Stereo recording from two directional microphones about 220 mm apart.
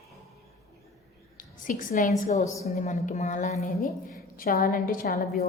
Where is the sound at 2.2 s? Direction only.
30° left (ahead or behind).